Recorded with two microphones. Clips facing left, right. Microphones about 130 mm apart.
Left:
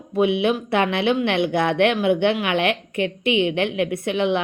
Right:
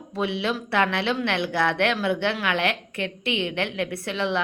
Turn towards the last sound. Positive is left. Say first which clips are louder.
# left 6 dB
turn(degrees=20)  # may be behind; listen again after turning